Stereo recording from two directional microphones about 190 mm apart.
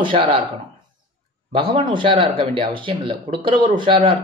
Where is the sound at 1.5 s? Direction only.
25° right (ahead or behind).